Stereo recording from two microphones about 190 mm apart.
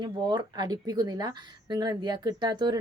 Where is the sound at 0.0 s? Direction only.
25° right (ahead or behind).